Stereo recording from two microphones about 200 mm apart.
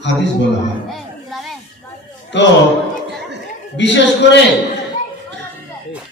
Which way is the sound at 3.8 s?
60° left (ahead or behind).